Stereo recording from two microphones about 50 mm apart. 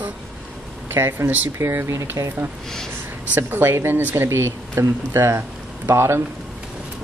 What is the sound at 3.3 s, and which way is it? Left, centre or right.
Speech, right.